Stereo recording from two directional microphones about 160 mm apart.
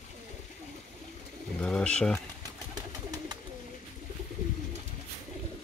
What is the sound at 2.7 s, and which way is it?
Pigeon, 25° right (ahead or behind).